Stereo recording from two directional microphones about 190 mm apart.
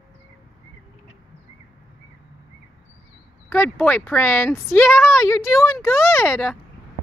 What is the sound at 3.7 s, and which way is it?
Speech, 10° left (ahead or behind).